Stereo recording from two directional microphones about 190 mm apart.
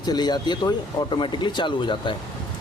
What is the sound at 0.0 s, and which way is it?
Speech, 20° left (ahead or behind).